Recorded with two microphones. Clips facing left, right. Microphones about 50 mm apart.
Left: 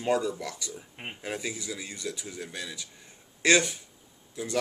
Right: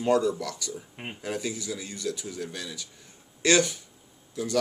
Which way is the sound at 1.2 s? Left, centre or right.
Left.